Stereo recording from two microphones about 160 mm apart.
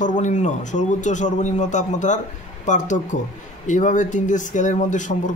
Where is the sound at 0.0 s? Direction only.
50° left (ahead or behind).